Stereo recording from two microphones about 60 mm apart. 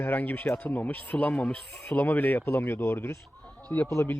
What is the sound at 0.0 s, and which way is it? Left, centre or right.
Speech, left.